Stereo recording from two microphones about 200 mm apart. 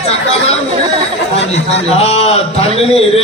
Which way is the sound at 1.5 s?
30° left (ahead or behind).